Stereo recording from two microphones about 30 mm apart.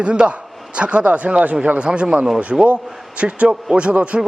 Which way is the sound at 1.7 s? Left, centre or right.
Right.